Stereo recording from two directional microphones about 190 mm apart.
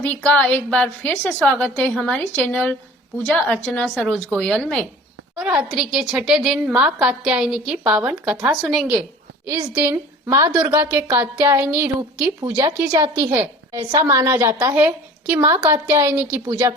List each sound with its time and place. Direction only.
0.0 s a woman's voice: 10° left (ahead or behind); by 16.7 s 15° right (ahead or behind)